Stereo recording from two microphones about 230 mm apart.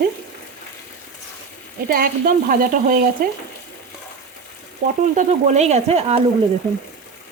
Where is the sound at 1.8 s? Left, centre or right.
Right.